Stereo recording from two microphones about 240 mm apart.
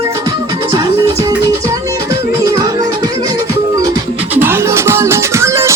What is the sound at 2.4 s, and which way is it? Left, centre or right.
Music, centre.